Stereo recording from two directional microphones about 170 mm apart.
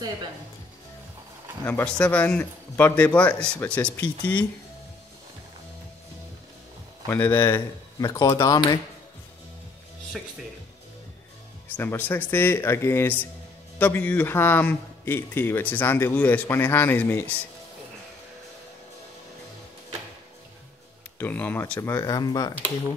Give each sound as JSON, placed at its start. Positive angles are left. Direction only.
{"t": 1.6, "sound": "a man's voice", "side_deg": 10}
{"t": 7.1, "sound": "speech", "side_deg": 10}
{"t": 11.7, "sound": "a man's voice", "side_deg": 10}
{"t": 21.2, "sound": "a man's voice", "side_deg": 10}